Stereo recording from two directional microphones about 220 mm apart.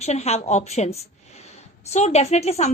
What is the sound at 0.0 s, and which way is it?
A woman's voice, 30° left (ahead or behind).